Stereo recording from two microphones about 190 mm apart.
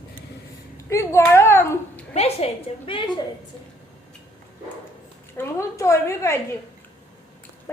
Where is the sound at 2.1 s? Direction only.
30° left (ahead or behind).